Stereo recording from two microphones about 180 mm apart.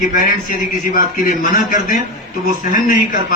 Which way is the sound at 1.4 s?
45° left (ahead or behind).